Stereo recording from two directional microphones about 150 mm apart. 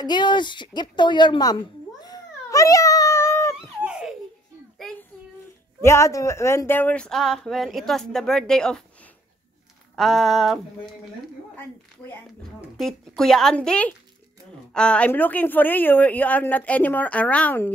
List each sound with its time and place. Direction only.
0.0 s a sound: 30° left (ahead or behind)
3.8 s laughter: 5° right (ahead or behind)
5.8 s speech: 20° left (ahead or behind)
9.9 s speech: centre (ahead or behind)
12.7 s a woman's voice: centre (ahead or behind)